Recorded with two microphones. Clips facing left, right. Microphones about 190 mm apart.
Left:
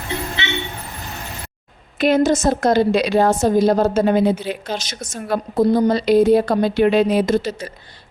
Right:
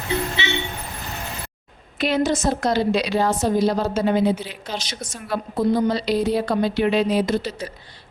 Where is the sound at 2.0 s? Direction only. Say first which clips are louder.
Left 5 dB; 45° left (ahead or behind).